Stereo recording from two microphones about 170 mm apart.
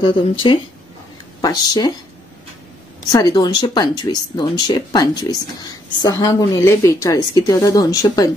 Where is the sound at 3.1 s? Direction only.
25° left (ahead or behind).